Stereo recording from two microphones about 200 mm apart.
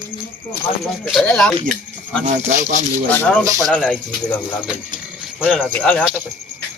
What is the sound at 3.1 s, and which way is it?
Speech, 10° left (ahead or behind).